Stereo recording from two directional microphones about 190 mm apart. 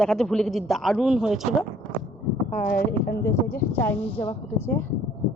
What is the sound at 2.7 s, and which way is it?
Speech, 55° left (ahead or behind).